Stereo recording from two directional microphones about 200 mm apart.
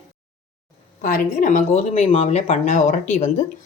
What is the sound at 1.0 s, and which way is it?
Speech, 40° left (ahead or behind).